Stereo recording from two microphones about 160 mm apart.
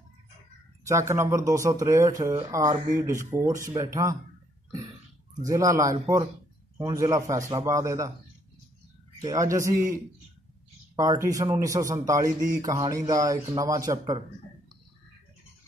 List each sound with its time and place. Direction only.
0.8 s speech: 15° right (ahead or behind)
5.4 s speech: 20° right (ahead or behind)
9.2 s speech: 20° right (ahead or behind)
11.0 s speech: 20° right (ahead or behind)